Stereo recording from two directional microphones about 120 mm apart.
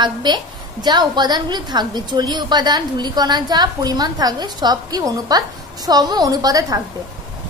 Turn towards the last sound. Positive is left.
turn(degrees=-30)  # may be behind; listen again after turning